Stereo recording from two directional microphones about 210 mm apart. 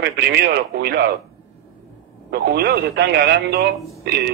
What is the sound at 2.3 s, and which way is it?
Speech, 50° right (ahead or behind).